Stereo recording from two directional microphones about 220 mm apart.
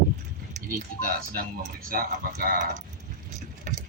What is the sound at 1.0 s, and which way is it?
A man's voice, 40° right (ahead or behind).